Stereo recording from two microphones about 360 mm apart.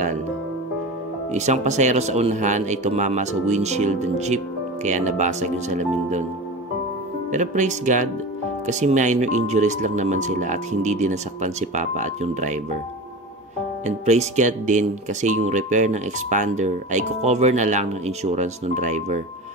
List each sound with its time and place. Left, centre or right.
1.3 s speech: centre
7.2 s speech: centre
13.8 s speech: centre